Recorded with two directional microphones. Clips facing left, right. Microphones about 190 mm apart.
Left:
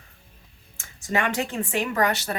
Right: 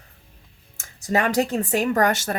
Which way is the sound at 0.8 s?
40° right (ahead or behind).